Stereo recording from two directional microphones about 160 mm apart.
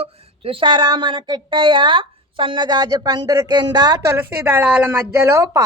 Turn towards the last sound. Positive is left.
turn(degrees=-15)  # may be behind; listen again after turning